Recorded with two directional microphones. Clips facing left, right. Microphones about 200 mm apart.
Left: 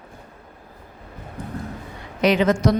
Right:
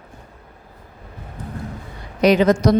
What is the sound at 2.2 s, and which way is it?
Speech, 40° right (ahead or behind).